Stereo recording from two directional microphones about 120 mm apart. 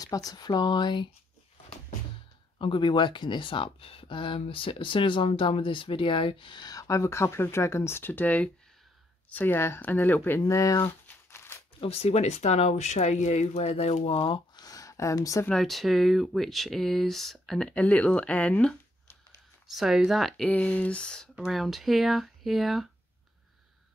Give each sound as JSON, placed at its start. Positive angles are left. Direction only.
{"t": 0.0, "sound": "speech", "side_deg": 30}
{"t": 2.6, "sound": "speech", "side_deg": 45}
{"t": 10.4, "sound": "speech", "side_deg": 25}
{"t": 11.1, "sound": "crumpling", "side_deg": 20}
{"t": 11.8, "sound": "speech", "side_deg": 55}
{"t": 14.5, "sound": "a sound", "side_deg": 30}
{"t": 15.4, "sound": "speech", "side_deg": 5}
{"t": 19.7, "sound": "speech", "side_deg": -5}
{"t": 20.4, "sound": "speech", "side_deg": 10}